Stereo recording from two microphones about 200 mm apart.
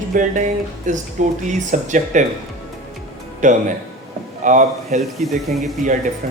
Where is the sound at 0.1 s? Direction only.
40° right (ahead or behind).